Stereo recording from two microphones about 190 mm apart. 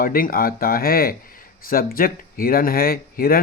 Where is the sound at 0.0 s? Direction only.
50° left (ahead or behind).